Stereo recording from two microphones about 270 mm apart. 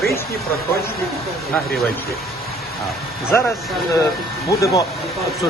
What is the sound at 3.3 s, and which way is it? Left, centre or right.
Mantra, centre.